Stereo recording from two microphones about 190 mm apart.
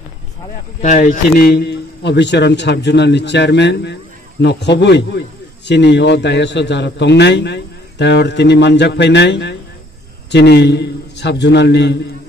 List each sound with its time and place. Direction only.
0.7 s a man's voice: 40° left (ahead or behind); by 12.0 s 65° left (ahead or behind)